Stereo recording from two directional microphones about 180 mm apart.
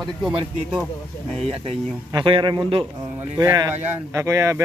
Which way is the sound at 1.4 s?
30° right (ahead or behind).